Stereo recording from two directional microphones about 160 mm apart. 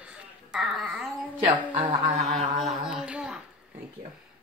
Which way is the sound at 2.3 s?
Centre (ahead or behind).